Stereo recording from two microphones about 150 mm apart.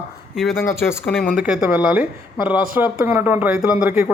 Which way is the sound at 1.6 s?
15° right (ahead or behind).